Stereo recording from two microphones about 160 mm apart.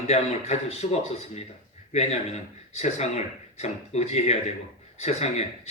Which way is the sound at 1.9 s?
45° left (ahead or behind).